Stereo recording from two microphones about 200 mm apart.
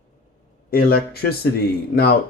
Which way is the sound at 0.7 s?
50° left (ahead or behind).